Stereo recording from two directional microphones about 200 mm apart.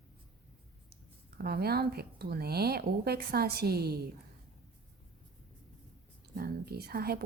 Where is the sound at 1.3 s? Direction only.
50° right (ahead or behind).